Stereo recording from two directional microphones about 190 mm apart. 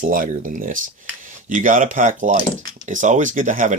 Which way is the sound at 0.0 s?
45° right (ahead or behind).